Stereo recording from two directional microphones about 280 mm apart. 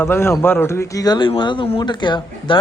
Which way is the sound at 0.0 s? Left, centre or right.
Centre.